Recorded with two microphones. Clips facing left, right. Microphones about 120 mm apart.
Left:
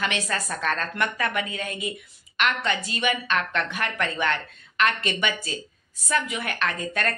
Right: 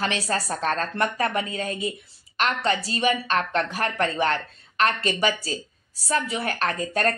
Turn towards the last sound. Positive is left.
turn(degrees=-35)  # may be behind; listen again after turning